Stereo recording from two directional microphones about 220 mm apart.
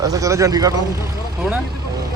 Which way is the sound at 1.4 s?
Centre (ahead or behind).